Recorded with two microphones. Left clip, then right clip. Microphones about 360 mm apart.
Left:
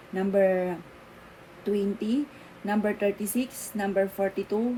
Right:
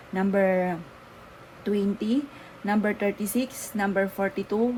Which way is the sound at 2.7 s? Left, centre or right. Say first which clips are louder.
Right 1 dB; right.